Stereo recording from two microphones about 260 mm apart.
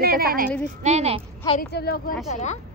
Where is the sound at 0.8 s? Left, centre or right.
Right.